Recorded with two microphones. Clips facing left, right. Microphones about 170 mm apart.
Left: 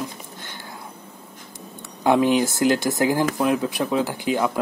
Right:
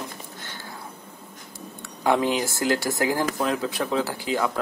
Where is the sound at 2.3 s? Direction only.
20° left (ahead or behind).